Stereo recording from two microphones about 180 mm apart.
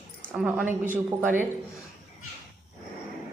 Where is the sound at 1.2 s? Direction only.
10° right (ahead or behind).